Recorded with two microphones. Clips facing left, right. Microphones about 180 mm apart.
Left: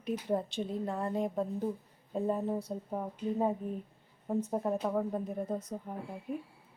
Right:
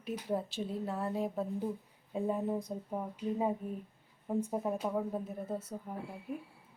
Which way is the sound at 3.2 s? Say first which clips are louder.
Left 2 dB; 10° right (ahead or behind).